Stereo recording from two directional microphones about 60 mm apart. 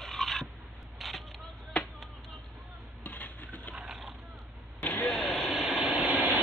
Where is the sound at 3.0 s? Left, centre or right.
Left.